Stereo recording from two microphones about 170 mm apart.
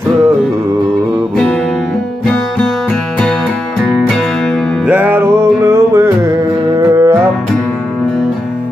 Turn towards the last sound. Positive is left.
turn(degrees=-15)  # may be behind; listen again after turning